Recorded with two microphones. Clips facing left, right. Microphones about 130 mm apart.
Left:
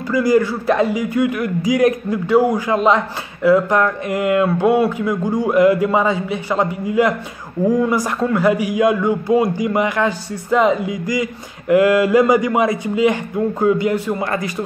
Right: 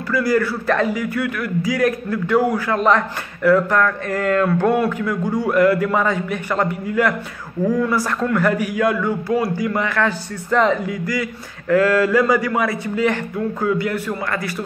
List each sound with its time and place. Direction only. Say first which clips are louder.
0.1 s speech: left 3 dB; 15° left (ahead or behind)
14.2 s a man's voice: left 3 dB; 25° left (ahead or behind)